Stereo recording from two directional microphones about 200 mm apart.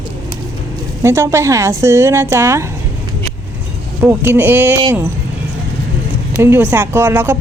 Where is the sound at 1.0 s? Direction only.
15° right (ahead or behind).